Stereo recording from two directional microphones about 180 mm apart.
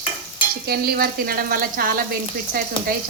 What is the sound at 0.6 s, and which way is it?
Speech, 60° right (ahead or behind).